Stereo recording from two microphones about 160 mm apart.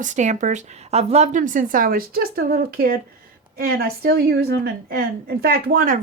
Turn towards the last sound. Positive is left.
turn(degrees=-60)  # may be behind; listen again after turning